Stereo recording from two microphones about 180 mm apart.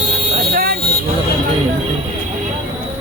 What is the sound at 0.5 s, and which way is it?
Vehicle, 60° right (ahead or behind).